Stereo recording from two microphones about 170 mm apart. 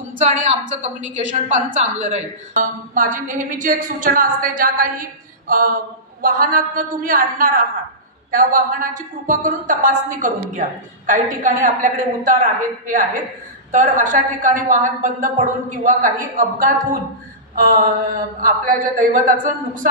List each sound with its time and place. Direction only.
0.2 s a woman's voice: 45° right (ahead or behind)
5.5 s mantra: 55° right (ahead or behind)
6.2 s a woman's voice: 55° right (ahead or behind)
17.6 s mantra: 55° right (ahead or behind)
18.4 s a woman's voice: 55° right (ahead or behind)